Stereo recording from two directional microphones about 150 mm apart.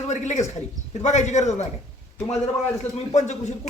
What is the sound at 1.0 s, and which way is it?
Speech, 50° left (ahead or behind).